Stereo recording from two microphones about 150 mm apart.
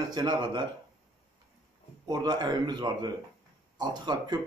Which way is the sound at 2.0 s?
30° right (ahead or behind).